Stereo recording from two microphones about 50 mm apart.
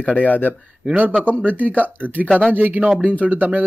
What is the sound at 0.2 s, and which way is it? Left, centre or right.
Speech, left.